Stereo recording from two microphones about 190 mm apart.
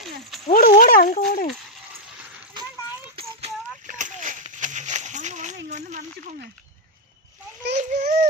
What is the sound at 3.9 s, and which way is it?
Splash, 40° right (ahead or behind).